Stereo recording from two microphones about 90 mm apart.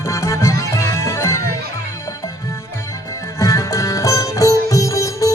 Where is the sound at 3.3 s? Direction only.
35° left (ahead or behind).